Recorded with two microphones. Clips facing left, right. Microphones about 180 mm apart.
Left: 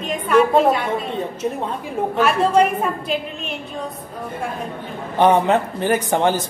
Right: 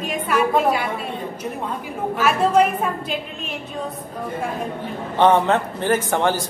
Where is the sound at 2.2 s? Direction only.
Centre (ahead or behind).